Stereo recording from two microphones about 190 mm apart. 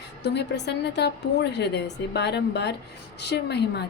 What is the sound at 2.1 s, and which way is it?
A woman's voice, 60° left (ahead or behind).